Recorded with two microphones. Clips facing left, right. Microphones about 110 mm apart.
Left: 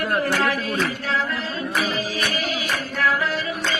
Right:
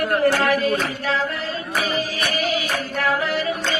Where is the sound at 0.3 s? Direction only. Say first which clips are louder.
Right 5 dB; 40° right (ahead or behind).